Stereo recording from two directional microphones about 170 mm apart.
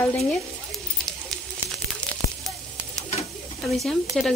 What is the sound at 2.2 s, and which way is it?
Sizzle, 25° left (ahead or behind).